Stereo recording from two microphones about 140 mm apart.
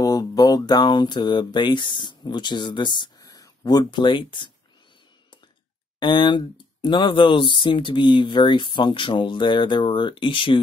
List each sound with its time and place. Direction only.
0.0 s speech: 25° left (ahead or behind)
5.9 s speech: 35° left (ahead or behind)